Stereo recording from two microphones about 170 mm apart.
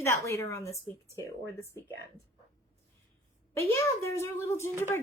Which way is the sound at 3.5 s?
15° left (ahead or behind).